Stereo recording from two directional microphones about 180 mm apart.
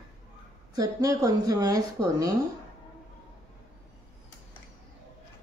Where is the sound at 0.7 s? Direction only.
20° right (ahead or behind).